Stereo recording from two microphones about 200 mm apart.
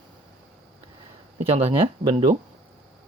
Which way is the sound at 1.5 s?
25° right (ahead or behind).